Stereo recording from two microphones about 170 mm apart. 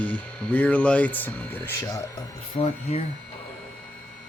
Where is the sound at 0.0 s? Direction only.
10° left (ahead or behind).